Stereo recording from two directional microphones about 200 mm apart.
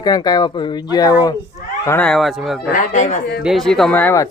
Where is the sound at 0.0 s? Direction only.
20° left (ahead or behind); by 2.6 s centre (ahead or behind).